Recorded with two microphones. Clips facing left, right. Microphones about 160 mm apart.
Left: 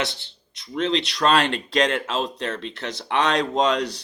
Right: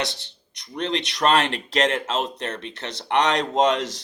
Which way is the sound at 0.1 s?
15° right (ahead or behind).